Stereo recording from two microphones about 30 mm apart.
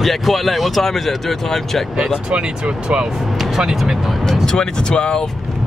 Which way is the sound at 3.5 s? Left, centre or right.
Centre.